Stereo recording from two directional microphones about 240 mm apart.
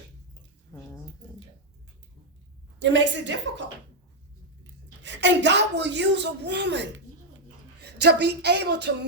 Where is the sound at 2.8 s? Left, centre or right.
Right.